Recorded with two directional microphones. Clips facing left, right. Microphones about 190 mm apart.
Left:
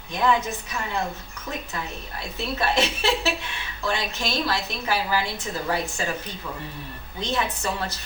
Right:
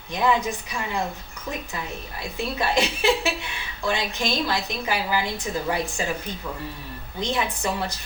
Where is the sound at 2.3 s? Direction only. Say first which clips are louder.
Even; 15° right (ahead or behind).